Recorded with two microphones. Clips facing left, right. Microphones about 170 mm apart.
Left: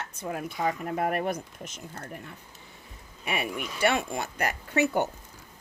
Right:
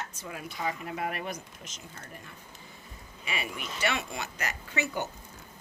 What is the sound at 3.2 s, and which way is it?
Speech, 55° left (ahead or behind).